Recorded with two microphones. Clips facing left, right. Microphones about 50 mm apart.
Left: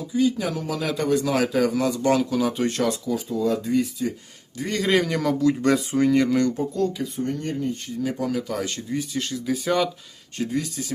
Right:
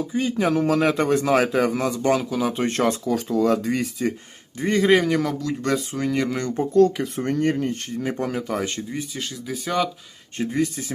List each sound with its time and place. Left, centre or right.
0.1 s speech: right
1.5 s a man's voice: right
2.1 s a man's voice: centre
2.6 s speech: right
3.1 s speech: right
4.5 s a man's voice: right
4.9 s a man's voice: centre
6.7 s speech: right
8.0 s speech: right
9.1 s speech: centre
10.5 s a man's voice: right